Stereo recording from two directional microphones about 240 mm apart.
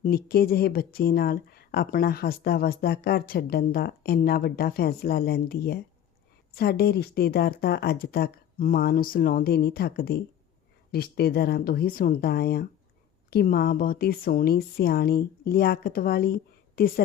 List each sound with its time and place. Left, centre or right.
0.0 s speech: left